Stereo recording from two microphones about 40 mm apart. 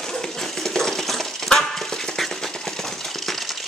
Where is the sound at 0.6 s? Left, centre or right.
Centre.